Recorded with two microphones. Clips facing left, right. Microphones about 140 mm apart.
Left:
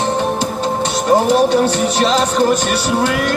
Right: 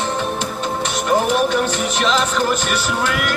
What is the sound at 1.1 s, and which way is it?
Speech, 35° left (ahead or behind).